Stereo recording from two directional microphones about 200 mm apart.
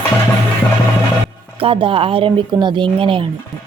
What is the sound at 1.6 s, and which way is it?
Speech, 25° right (ahead or behind).